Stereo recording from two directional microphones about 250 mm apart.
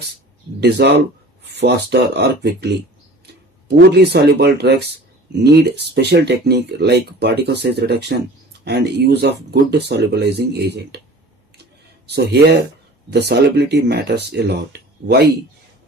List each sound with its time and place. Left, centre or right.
0.6 s speech: right
3.8 s speech: right
12.0 s speech: right